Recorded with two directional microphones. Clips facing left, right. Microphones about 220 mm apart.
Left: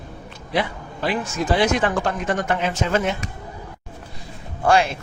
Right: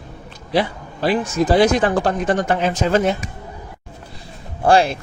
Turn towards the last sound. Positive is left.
turn(degrees=-35)  # may be behind; listen again after turning